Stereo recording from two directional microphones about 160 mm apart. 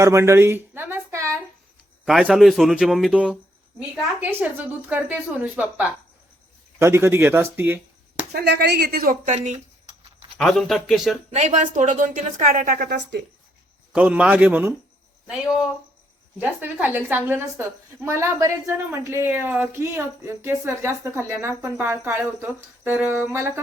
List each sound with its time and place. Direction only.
0.0 s a sound: 15° right (ahead or behind)
2.0 s a woman's voice: centre (ahead or behind)
8.3 s speech: 90° right; by 9.3 s 65° right (ahead or behind)
9.3 s a woman's voice: 50° right (ahead or behind)
10.3 s speech: 5° left (ahead or behind)
11.3 s a woman's voice: 50° right (ahead or behind); by 13.2 s 85° right
13.9 s a woman's voice: 5° right (ahead or behind)